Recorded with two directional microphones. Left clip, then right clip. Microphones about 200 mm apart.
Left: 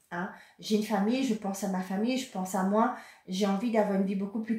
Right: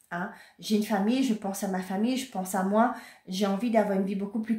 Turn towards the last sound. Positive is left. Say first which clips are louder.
# right 1 dB
turn(degrees=-35)  # may be behind; listen again after turning